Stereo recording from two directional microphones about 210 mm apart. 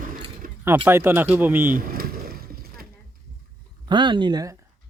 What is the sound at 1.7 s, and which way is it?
Vehicle, 45° right (ahead or behind).